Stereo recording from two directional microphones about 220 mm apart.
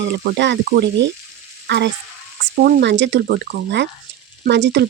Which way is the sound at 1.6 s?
50° right (ahead or behind).